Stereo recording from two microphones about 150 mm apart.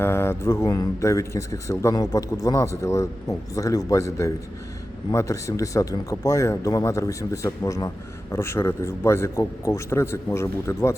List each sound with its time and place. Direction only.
0.0 s speech: 15° left (ahead or behind)